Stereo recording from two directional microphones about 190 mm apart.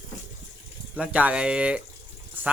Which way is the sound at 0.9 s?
5° right (ahead or behind).